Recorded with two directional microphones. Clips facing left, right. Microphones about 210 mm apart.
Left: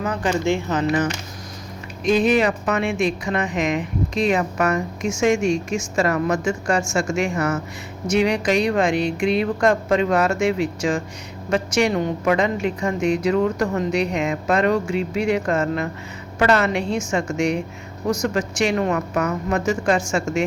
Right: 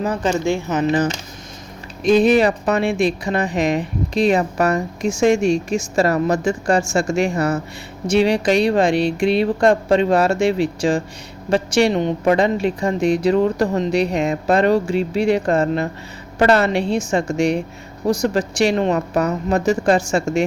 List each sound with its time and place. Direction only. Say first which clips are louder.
0.0 s speech: right 2 dB; 30° right (ahead or behind)
2.0 s speech: right 4 dB; 35° right (ahead or behind)